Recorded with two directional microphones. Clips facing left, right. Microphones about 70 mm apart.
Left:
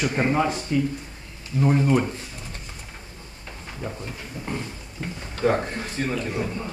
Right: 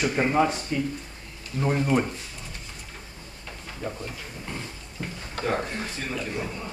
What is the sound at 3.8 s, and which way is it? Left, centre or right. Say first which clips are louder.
Speech: even; centre.